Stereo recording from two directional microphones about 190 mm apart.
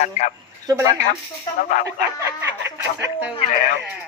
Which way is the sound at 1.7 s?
40° left (ahead or behind).